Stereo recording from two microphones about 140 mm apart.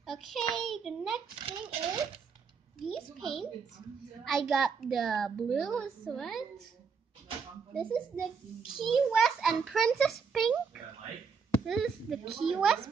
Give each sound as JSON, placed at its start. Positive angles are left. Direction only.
{"t": 0.0, "sound": "a child's voice", "side_deg": 0}
{"t": 1.3, "sound": "speech", "side_deg": -45}
{"t": 2.8, "sound": "a child's voice", "side_deg": 0}
{"t": 7.7, "sound": "a child's voice", "side_deg": 5}
{"t": 11.6, "sound": "a child's voice", "side_deg": 0}